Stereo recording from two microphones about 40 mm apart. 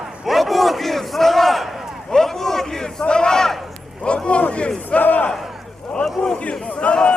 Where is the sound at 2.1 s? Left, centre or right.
Centre.